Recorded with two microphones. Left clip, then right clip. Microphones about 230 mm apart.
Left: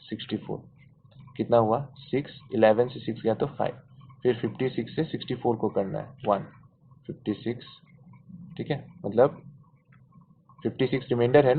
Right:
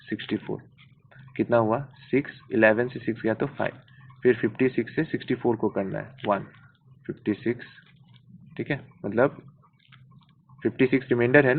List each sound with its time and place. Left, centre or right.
0.1 s speech: right
8.5 s speech: right
10.6 s speech: right